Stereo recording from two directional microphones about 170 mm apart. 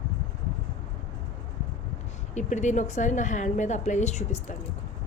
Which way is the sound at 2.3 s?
45° left (ahead or behind).